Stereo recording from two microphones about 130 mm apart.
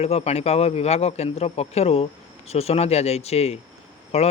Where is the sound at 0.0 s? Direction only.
55° left (ahead or behind).